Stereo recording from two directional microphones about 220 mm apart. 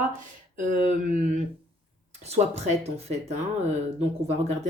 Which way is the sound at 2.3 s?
30° right (ahead or behind).